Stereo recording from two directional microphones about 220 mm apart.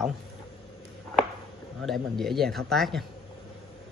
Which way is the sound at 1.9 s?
Centre (ahead or behind).